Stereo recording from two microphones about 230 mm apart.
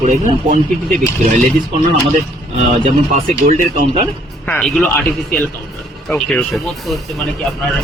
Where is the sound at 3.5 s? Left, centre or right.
Right.